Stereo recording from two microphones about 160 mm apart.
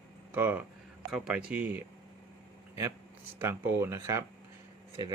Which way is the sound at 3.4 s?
15° right (ahead or behind).